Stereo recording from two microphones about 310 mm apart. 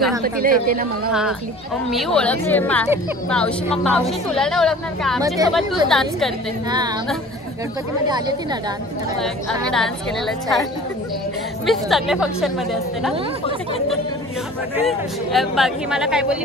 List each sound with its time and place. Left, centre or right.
0.2 s speech: right
1.9 s a woman's voice: centre
9.7 s a woman's voice: centre
14.9 s a woman's voice: centre